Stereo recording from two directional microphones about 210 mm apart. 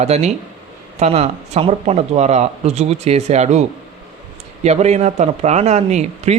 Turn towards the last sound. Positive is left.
turn(degrees=-30)  # may be behind; listen again after turning